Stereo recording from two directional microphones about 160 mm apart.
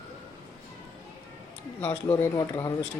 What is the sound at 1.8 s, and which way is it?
Speech, 15° left (ahead or behind).